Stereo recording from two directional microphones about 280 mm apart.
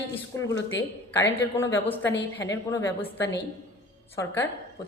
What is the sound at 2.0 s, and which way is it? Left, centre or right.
Speech, left.